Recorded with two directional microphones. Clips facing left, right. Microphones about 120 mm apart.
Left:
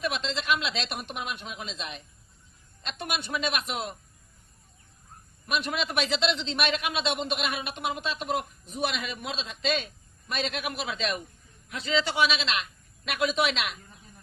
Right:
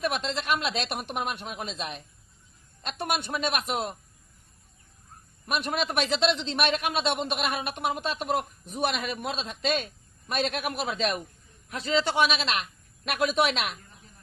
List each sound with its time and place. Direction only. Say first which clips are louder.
0.0 s a man's voice: right 2 dB; 50° right (ahead or behind)
5.5 s a man's voice: right 1 dB; 50° right (ahead or behind)